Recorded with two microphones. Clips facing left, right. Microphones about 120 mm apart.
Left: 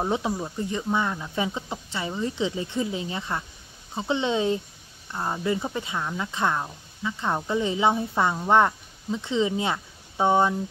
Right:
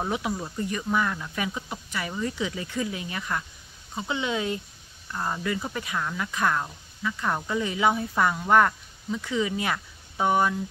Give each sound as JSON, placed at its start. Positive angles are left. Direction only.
{"t": 0.3, "sound": "a woman's voice", "side_deg": 15}